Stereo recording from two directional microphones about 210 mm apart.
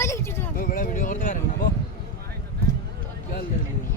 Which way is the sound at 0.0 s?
15° left (ahead or behind).